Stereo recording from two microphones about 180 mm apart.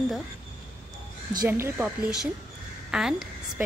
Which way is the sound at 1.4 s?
15° right (ahead or behind).